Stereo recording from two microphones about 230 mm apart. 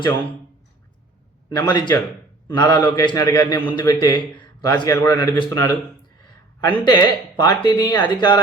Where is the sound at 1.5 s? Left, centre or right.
Centre.